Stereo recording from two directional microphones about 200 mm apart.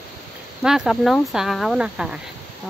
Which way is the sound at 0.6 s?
Centre (ahead or behind).